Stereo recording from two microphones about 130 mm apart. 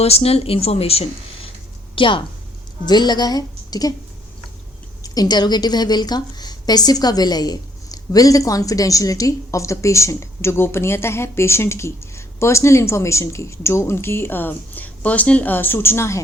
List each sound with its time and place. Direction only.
0.0 s a woman's voice: 50° left (ahead or behind); by 3.9 s 30° left (ahead or behind)
5.0 s a woman's voice: 30° left (ahead or behind)